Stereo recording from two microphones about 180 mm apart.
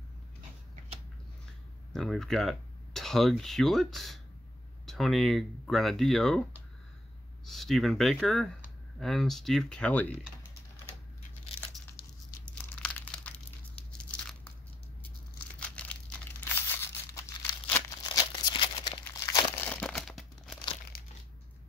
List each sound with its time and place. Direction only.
1.9 s speech: centre (ahead or behind)
7.4 s speech: centre (ahead or behind)
12.4 s crumpling: 5° left (ahead or behind)
14.1 s biting: 5° left (ahead or behind)
15.6 s crumpling: 5° left (ahead or behind)
16.5 s a sound: 10° left (ahead or behind)
18.0 s crumpling: 25° left (ahead or behind)
19.5 s crumpling: 10° left (ahead or behind)
20.9 s crushing: 55° left (ahead or behind)